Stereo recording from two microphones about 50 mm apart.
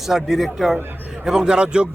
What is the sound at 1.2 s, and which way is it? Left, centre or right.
Speech, centre.